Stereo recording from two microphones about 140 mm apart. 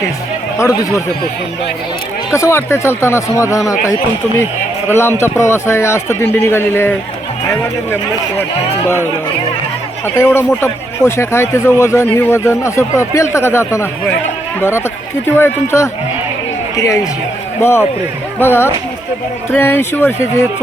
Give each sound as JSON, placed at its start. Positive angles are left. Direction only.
{"t": 2.3, "sound": "a man's voice", "side_deg": 20}
{"t": 4.9, "sound": "a man's voice", "side_deg": 15}
{"t": 10.2, "sound": "a man's voice", "side_deg": 15}
{"t": 15.3, "sound": "a man's voice", "side_deg": 20}